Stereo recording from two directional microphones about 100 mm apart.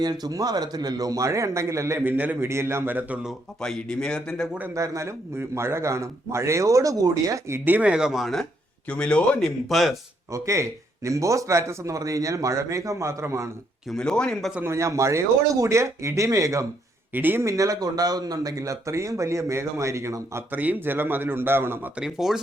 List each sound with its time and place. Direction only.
0.0 s a man's voice: 40° right (ahead or behind); by 3.2 s 20° right (ahead or behind)
3.6 s speech: 5° left (ahead or behind)
4.7 s a man's voice: 30° right (ahead or behind); by 8.4 s centre (ahead or behind)
8.9 s speech: 10° left (ahead or behind)
9.6 s speech: centre (ahead or behind)
10.3 s a man's voice: 30° right (ahead or behind)
13.9 s speech: 5° left (ahead or behind)
14.6 s a man's voice: 30° right (ahead or behind)
17.2 s a man's voice: 20° right (ahead or behind)
17.6 s a man's voice: 35° right (ahead or behind)
20.5 s a man's voice: 15° right (ahead or behind)
21.9 s speech: 5° right (ahead or behind)